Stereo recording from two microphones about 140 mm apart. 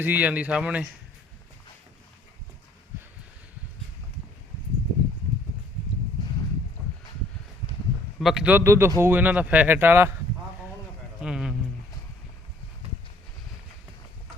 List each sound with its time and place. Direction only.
0.0 s speech: 10° right (ahead or behind)
6.8 s a sound: centre (ahead or behind)
8.2 s a man's voice: 5° right (ahead or behind)
8.5 s speech: 20° right (ahead or behind)
11.2 s speech: 5° right (ahead or behind)